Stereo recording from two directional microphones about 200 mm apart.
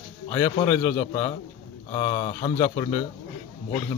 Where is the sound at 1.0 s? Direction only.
25° left (ahead or behind).